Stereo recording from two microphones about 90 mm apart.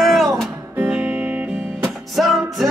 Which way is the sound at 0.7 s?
15° right (ahead or behind).